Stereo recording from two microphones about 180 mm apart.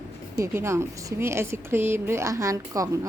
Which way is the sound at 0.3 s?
15° right (ahead or behind).